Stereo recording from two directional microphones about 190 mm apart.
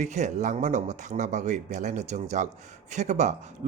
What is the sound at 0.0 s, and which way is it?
Speech, 40° right (ahead or behind).